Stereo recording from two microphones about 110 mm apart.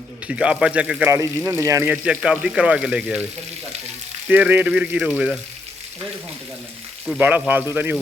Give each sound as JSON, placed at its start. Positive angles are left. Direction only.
{"t": 0.3, "sound": "speech", "side_deg": -10}
{"t": 1.1, "sound": "speech", "side_deg": -25}
{"t": 1.9, "sound": "speech", "side_deg": -5}
{"t": 4.3, "sound": "speech", "side_deg": -15}
{"t": 7.2, "sound": "speech", "side_deg": -15}